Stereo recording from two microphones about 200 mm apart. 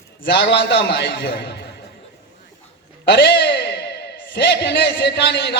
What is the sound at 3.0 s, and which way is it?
A man's voice, 60° left (ahead or behind).